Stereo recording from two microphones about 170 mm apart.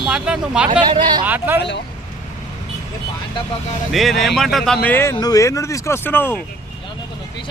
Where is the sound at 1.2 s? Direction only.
10° right (ahead or behind).